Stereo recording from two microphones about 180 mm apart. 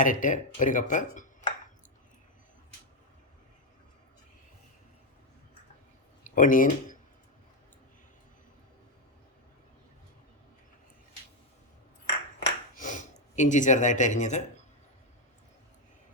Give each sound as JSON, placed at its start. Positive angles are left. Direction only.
{"t": 0.0, "sound": "speech", "side_deg": 45}
{"t": 6.2, "sound": "speech", "side_deg": 45}
{"t": 12.4, "sound": "a sound", "side_deg": 45}